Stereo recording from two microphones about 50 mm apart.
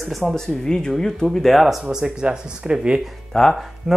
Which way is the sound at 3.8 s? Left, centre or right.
Centre.